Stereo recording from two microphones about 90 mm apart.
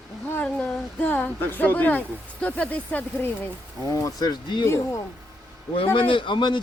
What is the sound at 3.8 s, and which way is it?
Speech, 40° left (ahead or behind).